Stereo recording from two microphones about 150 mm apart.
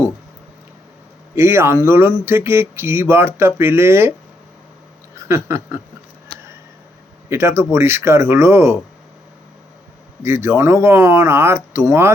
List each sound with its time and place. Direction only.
1.4 s speech: 15° right (ahead or behind)
5.1 s speech: 20° right (ahead or behind)
7.3 s speech: 15° right (ahead or behind)
10.2 s speech: 15° right (ahead or behind)